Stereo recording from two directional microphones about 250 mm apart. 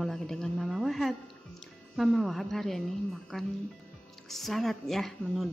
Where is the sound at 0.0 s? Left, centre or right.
Centre.